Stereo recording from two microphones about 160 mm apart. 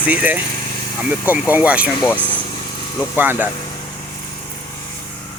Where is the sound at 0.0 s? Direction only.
10° right (ahead or behind).